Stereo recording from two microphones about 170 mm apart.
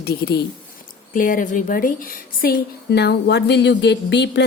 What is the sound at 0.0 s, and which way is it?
Speech, 70° left (ahead or behind).